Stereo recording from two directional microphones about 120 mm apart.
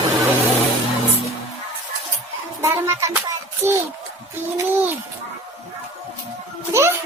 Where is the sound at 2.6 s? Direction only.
25° right (ahead or behind).